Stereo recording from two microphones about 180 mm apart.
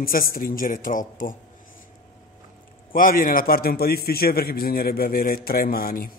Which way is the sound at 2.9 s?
50° left (ahead or behind).